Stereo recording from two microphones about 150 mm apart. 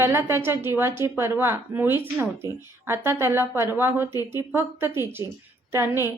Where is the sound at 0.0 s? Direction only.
15° right (ahead or behind).